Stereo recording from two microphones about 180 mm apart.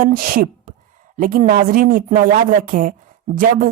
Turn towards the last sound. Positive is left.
turn(degrees=-50)  # may be behind; listen again after turning